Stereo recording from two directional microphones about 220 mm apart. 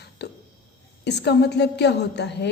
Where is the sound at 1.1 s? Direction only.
50° left (ahead or behind).